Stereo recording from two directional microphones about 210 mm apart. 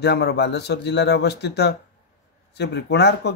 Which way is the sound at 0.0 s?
55° left (ahead or behind).